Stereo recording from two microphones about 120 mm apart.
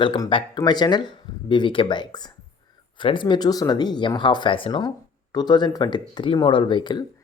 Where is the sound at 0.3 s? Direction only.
45° left (ahead or behind).